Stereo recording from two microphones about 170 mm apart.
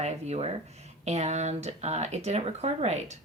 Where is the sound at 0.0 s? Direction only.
40° right (ahead or behind).